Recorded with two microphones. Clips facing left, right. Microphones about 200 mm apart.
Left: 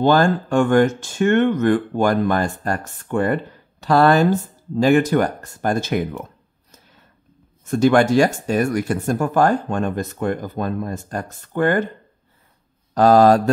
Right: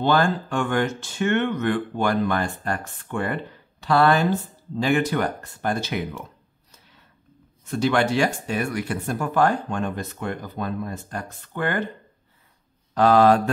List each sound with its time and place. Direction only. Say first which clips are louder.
0.0 s speech: left 5 dB; 45° left (ahead or behind)
7.6 s speech: left 6 dB; 45° left (ahead or behind)
12.9 s mantra: left 4 dB; 40° left (ahead or behind)